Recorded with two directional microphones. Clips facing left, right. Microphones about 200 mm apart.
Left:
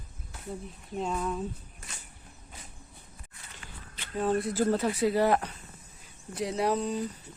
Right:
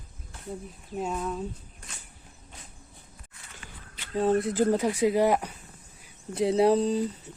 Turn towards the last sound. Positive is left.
turn(degrees=-30)  # may be behind; listen again after turning